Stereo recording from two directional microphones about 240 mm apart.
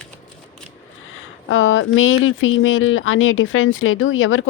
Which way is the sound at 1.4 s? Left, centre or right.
Left.